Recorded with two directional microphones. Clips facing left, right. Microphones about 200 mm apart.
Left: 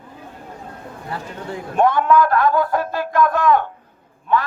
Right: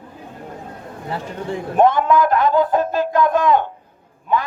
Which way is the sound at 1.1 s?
25° right (ahead or behind).